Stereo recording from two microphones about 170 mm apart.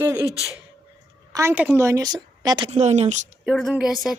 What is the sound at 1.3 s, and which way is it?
A woman's voice, 15° right (ahead or behind).